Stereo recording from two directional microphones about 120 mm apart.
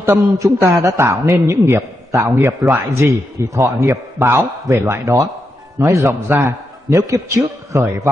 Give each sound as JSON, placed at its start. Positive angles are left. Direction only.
{"t": 0.0, "sound": "a man's voice", "side_deg": -25}